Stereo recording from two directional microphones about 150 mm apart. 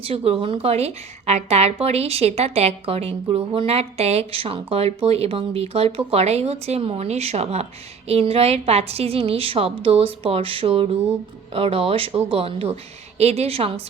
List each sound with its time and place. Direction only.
0.0 s a woman's voice: 40° right (ahead or behind)